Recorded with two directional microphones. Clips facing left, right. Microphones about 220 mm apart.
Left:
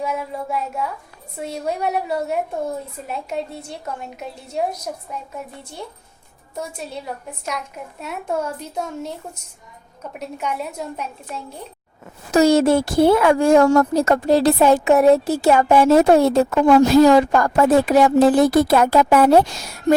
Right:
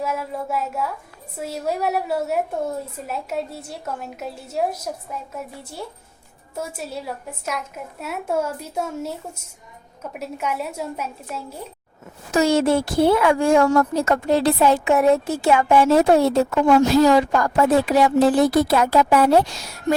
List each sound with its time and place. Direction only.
0.0 s a woman's voice: centre (ahead or behind)
12.3 s speech: 40° left (ahead or behind)